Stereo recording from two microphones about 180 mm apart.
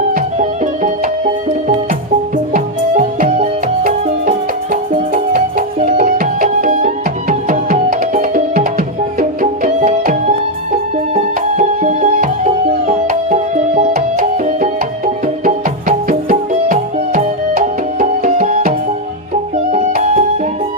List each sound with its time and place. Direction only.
0.1 s music: 45° right (ahead or behind)
19.7 s music: 40° right (ahead or behind)